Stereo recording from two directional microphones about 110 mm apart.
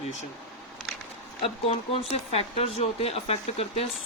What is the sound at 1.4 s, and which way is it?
Speech, 70° left (ahead or behind).